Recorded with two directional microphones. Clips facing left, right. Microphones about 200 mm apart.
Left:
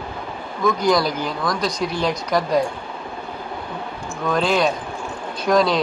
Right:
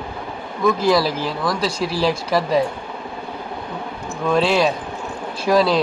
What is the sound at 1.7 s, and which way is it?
Speech, 30° right (ahead or behind).